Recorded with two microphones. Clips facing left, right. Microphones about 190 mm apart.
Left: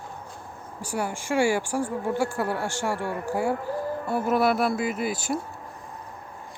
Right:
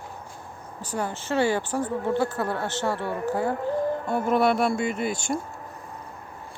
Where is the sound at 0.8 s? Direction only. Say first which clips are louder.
Even; 10° left (ahead or behind).